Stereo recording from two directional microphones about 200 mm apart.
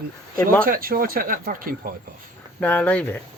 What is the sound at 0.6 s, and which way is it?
Speech, 45° right (ahead or behind).